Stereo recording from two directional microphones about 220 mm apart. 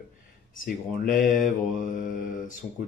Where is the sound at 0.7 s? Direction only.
40° left (ahead or behind).